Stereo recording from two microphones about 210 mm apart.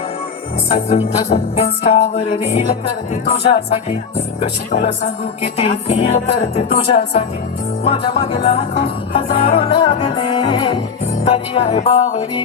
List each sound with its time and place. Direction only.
0.7 s music: 30° left (ahead or behind)
3.2 s music: 30° left (ahead or behind)